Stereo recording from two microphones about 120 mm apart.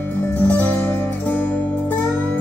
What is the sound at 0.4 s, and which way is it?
Music, 15° left (ahead or behind).